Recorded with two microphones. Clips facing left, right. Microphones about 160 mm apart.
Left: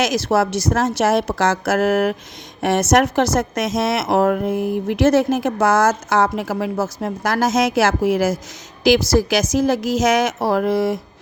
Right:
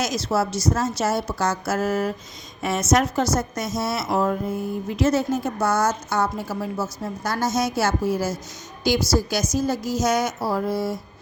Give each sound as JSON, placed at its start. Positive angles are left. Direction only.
{"t": 0.0, "sound": "a woman's voice", "side_deg": 90}